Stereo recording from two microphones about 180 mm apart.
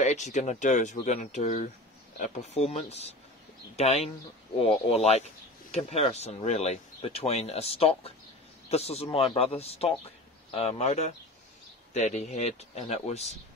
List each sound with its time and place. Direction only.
0.0 s speech: 40° left (ahead or behind)